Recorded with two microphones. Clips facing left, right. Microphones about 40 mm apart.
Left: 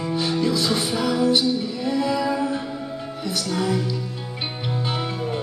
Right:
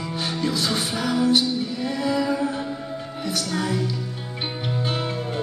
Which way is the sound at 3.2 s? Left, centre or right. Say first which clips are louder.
Even; right.